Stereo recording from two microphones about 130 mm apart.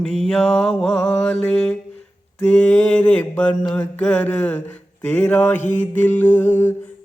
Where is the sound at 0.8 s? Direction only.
10° left (ahead or behind).